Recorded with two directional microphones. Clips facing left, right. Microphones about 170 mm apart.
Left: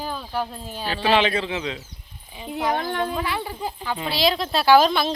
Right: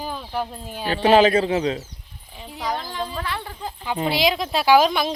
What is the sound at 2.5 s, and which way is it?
Speech, 60° left (ahead or behind).